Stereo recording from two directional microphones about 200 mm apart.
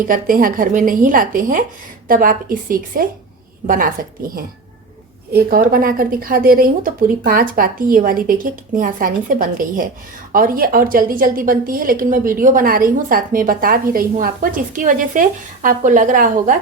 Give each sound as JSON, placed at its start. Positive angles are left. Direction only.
{"t": 0.0, "sound": "a woman's voice", "side_deg": -45}
{"t": 5.3, "sound": "a woman's voice", "side_deg": -50}